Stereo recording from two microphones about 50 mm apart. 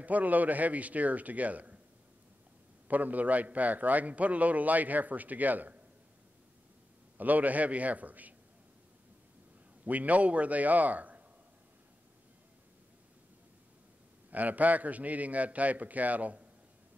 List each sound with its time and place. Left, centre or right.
0.0 s a man's voice: right
2.9 s a man's voice: right
7.2 s a man's voice: right
9.8 s a man's voice: right
14.3 s a man's voice: right